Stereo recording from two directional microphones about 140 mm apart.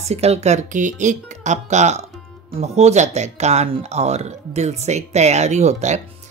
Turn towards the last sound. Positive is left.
turn(degrees=-55)  # may be behind; listen again after turning